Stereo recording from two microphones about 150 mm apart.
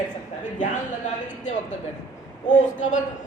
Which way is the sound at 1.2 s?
55° left (ahead or behind).